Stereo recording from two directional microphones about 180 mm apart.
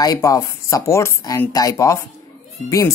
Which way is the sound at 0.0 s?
20° left (ahead or behind).